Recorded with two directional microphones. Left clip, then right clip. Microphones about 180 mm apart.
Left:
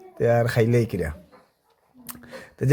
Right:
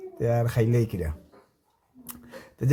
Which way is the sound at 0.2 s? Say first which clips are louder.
Left 6 dB; 35° left (ahead or behind).